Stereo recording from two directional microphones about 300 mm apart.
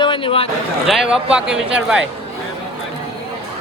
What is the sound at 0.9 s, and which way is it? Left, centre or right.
Speech, centre.